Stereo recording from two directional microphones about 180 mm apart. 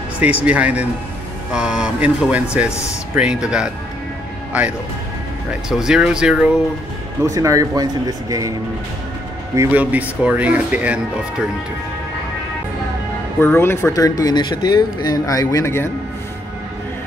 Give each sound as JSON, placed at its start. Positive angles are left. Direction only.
{"t": 0.2, "sound": "speech", "side_deg": -10}
{"t": 7.2, "sound": "speech", "side_deg": -20}
{"t": 9.6, "sound": "speech", "side_deg": -10}
{"t": 13.4, "sound": "speech", "side_deg": 10}